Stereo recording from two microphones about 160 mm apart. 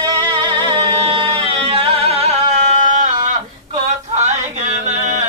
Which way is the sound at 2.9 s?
50° right (ahead or behind).